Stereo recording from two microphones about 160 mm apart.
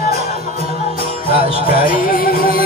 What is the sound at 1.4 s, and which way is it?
Music, 65° left (ahead or behind).